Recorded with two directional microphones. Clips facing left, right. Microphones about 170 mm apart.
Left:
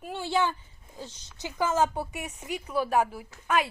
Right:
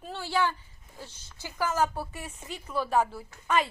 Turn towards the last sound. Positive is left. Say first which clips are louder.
# even
turn(degrees=10)  # may be behind; listen again after turning